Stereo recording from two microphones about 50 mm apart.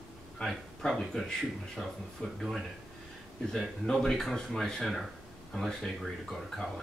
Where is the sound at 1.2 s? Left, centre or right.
Centre.